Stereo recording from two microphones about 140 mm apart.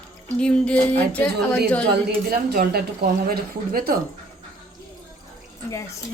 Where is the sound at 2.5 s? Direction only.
90° right.